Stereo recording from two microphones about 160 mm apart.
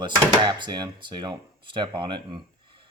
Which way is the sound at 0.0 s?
30° right (ahead or behind).